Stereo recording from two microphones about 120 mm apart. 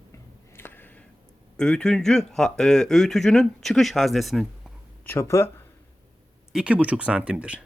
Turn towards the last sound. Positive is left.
turn(degrees=-10)  # may be behind; listen again after turning